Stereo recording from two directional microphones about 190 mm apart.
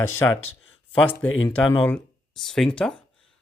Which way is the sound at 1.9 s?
5° left (ahead or behind).